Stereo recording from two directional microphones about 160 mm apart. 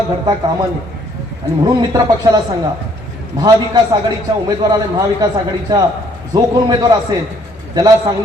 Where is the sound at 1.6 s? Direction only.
20° right (ahead or behind).